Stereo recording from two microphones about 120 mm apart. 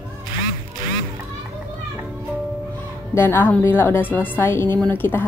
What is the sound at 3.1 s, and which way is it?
Speech, 20° left (ahead or behind).